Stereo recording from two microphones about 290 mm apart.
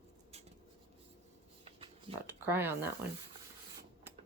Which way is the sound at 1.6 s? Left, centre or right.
Centre.